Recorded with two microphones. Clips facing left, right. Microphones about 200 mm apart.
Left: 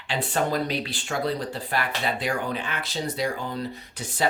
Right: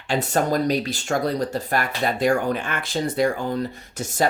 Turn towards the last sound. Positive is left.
turn(degrees=-45)  # may be behind; listen again after turning